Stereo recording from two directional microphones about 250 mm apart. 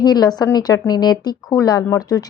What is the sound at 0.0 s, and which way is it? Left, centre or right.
A woman's voice, centre.